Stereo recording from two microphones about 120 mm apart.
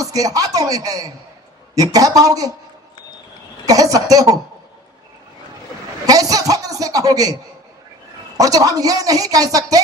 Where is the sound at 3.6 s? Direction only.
30° right (ahead or behind).